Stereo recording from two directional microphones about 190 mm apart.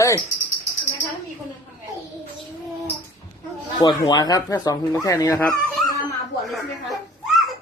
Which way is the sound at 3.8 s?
20° left (ahead or behind).